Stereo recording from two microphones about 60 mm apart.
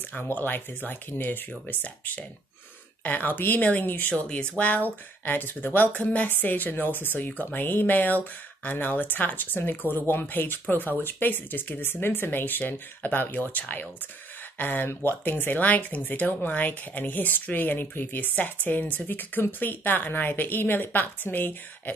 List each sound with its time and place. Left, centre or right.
0.1 s speech: left
4.1 s speech: centre